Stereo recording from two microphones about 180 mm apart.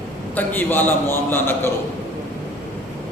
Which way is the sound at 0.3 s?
10° left (ahead or behind).